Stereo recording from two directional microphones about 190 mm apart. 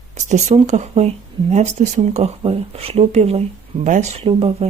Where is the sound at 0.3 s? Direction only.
40° right (ahead or behind).